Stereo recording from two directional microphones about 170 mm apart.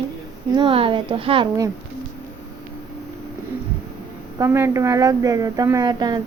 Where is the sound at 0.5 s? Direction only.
30° right (ahead or behind).